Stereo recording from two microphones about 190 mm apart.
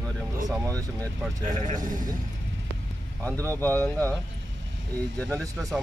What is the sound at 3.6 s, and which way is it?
Speech, 10° left (ahead or behind).